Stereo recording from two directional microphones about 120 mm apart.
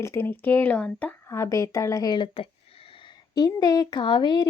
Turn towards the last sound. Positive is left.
turn(degrees=40)  # may be behind; listen again after turning